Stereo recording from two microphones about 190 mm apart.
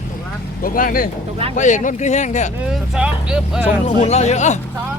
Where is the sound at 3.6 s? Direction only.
35° left (ahead or behind).